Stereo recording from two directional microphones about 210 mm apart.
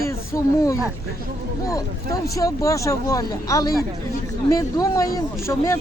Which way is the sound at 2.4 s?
15° left (ahead or behind).